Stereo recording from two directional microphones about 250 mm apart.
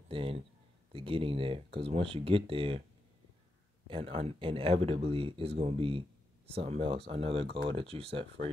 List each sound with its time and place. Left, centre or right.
0.1 s speech: right
3.8 s speech: right